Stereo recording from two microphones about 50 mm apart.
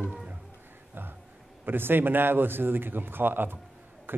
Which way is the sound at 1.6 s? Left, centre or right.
Right.